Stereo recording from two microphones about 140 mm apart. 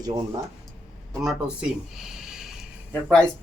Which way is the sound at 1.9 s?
5° right (ahead or behind).